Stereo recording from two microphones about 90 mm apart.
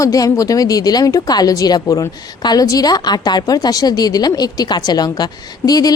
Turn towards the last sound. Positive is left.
turn(degrees=45)  # may be behind; listen again after turning